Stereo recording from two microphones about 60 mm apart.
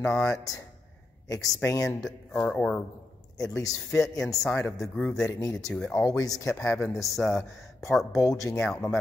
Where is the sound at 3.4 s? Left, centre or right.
Left.